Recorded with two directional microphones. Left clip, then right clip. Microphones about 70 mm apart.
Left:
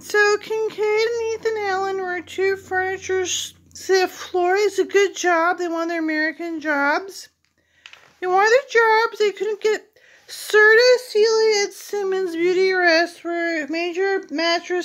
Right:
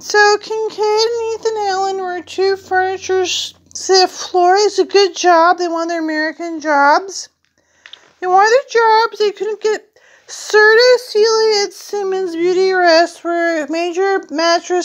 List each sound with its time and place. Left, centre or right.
0.0 s speech: centre
1.6 s a sound: right
3.8 s speech: centre
4.8 s a sound: centre
5.8 s speech: centre
8.4 s speech: centre
8.8 s child singing: right
9.6 s speech: centre
10.7 s a sound: right
12.3 s child singing: centre; by 14.8 s right